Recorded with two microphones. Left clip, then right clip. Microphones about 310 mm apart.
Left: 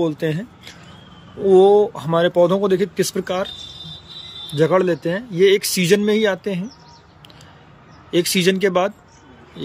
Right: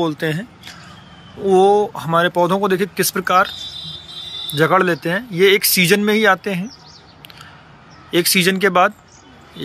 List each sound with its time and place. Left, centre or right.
0.0 s speech: centre
4.6 s speech: centre
8.1 s speech: centre